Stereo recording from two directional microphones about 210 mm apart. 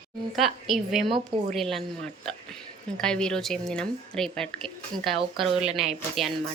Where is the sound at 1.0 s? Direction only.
25° right (ahead or behind).